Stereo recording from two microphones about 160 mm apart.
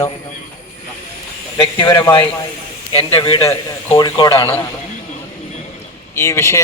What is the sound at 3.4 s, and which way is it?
Speech, 20° left (ahead or behind).